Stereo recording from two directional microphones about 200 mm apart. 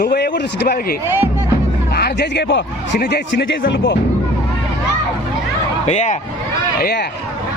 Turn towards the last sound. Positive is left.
turn(degrees=50)  # may be behind; listen again after turning